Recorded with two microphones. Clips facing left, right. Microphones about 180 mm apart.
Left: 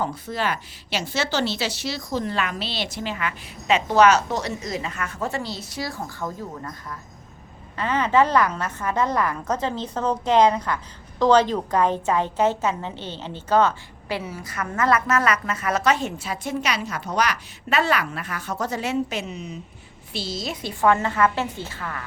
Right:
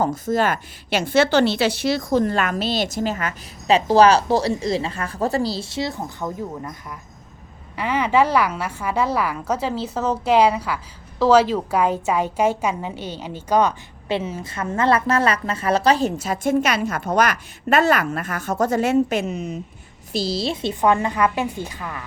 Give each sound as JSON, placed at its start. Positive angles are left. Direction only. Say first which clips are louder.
{"t": 0.0, "sound": "a woman's voice", "louder": "right 6 dB", "side_deg": -45}
{"t": 20.1, "sound": "a woman's voice", "louder": "right 7 dB", "side_deg": -35}